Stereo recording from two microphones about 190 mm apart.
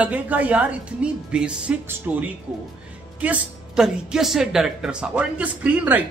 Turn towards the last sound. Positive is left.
turn(degrees=-10)  # may be behind; listen again after turning